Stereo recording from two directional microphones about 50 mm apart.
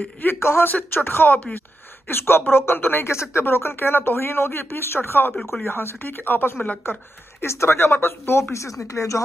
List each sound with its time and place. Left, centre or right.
0.2 s speech: left
0.7 s speech: left
3.1 s speech: left
5.4 s speech: centre
5.7 s a woman's voice: left
7.4 s speech: left